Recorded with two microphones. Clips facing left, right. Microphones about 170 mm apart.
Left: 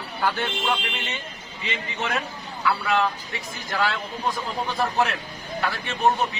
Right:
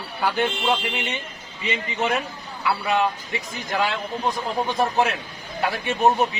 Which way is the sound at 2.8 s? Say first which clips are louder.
Right 1 dB; 15° right (ahead or behind).